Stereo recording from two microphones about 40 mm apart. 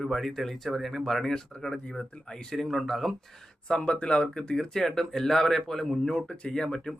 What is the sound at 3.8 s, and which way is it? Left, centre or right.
Speech, left.